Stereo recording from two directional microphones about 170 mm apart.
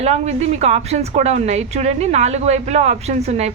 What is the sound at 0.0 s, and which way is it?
A woman's voice, 40° right (ahead or behind).